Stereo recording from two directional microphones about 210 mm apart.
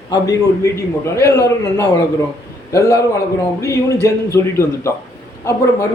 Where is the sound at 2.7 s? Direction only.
15° left (ahead or behind).